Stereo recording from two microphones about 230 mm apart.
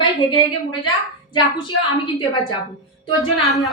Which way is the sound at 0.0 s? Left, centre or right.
Centre.